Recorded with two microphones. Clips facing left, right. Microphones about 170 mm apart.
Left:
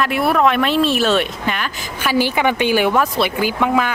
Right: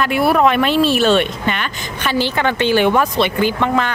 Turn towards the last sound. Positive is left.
turn(degrees=5)  # may be behind; listen again after turning